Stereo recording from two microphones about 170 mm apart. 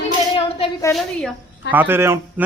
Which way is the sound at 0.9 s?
15° left (ahead or behind).